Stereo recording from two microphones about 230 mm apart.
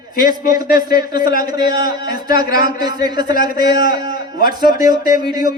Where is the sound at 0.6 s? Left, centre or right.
Left.